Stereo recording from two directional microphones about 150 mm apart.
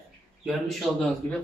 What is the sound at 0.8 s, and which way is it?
Speech, 5° right (ahead or behind).